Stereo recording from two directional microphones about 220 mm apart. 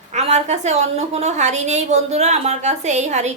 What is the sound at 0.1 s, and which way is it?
A woman's voice, 30° right (ahead or behind).